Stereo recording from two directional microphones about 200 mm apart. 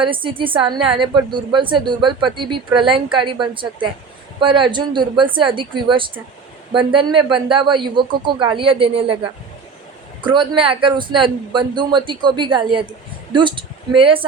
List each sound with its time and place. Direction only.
0.0 s speech: 25° right (ahead or behind)